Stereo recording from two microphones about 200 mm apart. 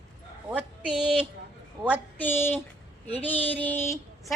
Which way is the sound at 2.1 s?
10° left (ahead or behind).